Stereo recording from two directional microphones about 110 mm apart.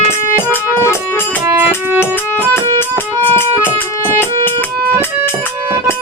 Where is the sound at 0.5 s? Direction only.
20° left (ahead or behind).